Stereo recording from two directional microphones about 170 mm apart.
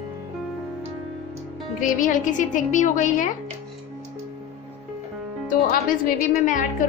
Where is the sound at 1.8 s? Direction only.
50° left (ahead or behind).